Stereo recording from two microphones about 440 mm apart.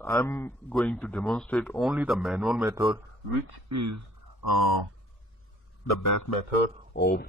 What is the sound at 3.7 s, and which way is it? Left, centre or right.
Speech, right.